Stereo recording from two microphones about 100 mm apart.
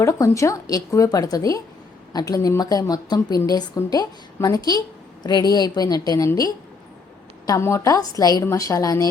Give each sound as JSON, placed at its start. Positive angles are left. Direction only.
{"t": 0.0, "sound": "a woman's voice", "side_deg": 30}
{"t": 7.6, "sound": "a woman's voice", "side_deg": 30}